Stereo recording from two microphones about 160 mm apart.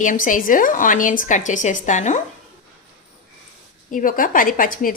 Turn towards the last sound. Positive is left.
turn(degrees=60)  # may be behind; listen again after turning